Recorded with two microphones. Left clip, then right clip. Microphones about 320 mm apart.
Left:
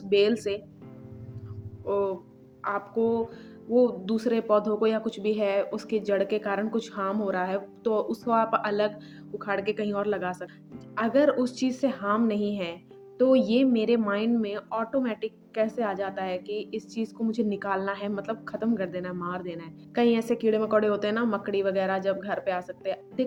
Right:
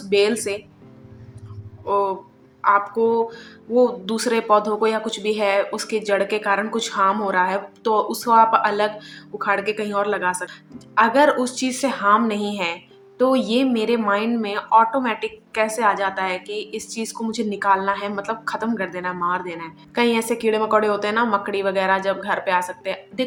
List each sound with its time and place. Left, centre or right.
0.1 s speech: left
1.8 s speech: left
2.6 s music: left